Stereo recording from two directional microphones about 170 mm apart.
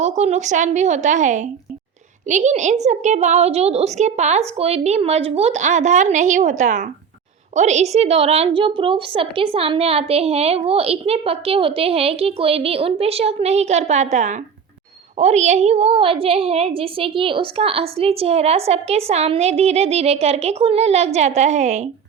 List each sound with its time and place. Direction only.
0.0 s a woman's voice: 40° right (ahead or behind)